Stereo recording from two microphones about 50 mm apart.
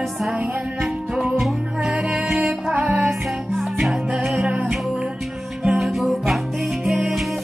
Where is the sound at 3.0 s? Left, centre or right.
Centre.